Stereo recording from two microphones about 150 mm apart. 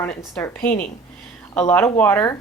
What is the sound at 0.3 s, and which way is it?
Speech, 15° left (ahead or behind).